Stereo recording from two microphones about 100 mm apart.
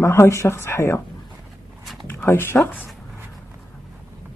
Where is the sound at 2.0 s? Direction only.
25° left (ahead or behind).